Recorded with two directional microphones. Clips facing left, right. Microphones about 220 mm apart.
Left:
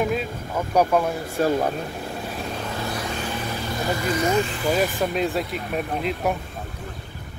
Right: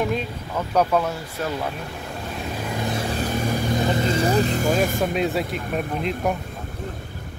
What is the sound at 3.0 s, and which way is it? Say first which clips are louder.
Vehicle: right 4 dB; 35° right (ahead or behind).